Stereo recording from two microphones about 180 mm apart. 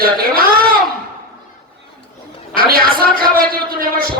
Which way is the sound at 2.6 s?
55° right (ahead or behind).